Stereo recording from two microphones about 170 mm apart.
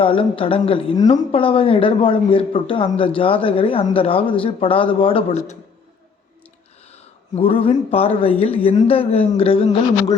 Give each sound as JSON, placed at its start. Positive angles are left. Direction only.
{"t": 0.0, "sound": "speech", "side_deg": 30}
{"t": 7.3, "sound": "speech", "side_deg": 35}